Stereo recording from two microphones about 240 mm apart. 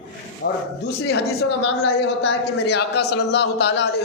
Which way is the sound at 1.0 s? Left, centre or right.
Left.